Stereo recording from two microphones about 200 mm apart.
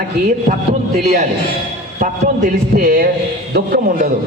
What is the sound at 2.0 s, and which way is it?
Music, 40° right (ahead or behind).